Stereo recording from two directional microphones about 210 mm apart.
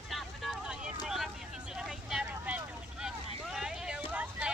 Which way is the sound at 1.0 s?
Centre (ahead or behind).